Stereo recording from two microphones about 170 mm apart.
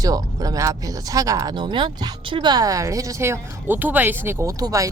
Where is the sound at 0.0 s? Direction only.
20° right (ahead or behind).